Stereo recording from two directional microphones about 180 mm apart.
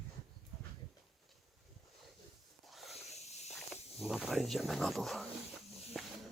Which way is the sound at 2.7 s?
Centre (ahead or behind).